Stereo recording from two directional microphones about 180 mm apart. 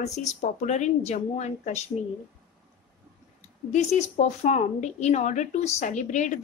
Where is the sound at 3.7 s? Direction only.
40° left (ahead or behind).